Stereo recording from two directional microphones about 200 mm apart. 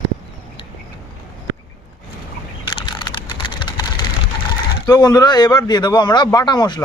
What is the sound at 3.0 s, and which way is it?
Typing, 25° left (ahead or behind).